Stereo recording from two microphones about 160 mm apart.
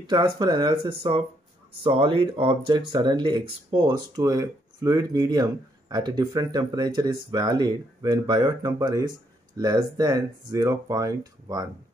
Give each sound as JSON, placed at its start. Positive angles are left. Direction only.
{"t": 0.0, "sound": "speech", "side_deg": -30}